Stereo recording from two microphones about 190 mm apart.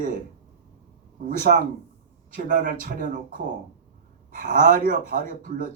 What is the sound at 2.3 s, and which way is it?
Speech, 45° right (ahead or behind).